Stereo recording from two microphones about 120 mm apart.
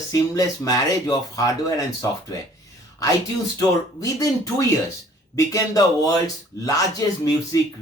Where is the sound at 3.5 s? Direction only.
30° left (ahead or behind).